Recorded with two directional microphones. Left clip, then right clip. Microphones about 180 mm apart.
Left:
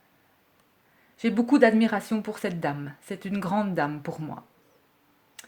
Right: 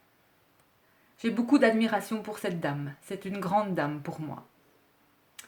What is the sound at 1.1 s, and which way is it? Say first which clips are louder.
Speech: left 3 dB; 35° left (ahead or behind).